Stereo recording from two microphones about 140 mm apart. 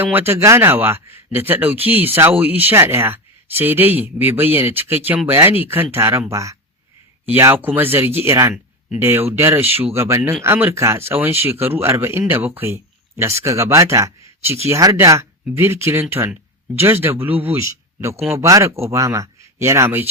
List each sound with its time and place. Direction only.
0.0 s speech: 15° right (ahead or behind)